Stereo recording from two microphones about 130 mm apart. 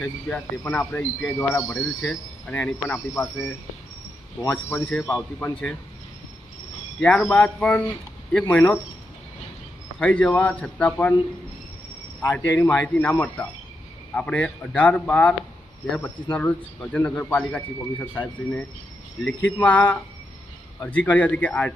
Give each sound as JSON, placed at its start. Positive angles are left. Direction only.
{"t": 0.0, "sound": "a man's voice", "side_deg": 10}
{"t": 4.4, "sound": "a man's voice", "side_deg": 15}
{"t": 7.0, "sound": "a man's voice", "side_deg": 10}
{"t": 10.0, "sound": "a man's voice", "side_deg": 10}
{"t": 12.2, "sound": "a man's voice", "side_deg": 15}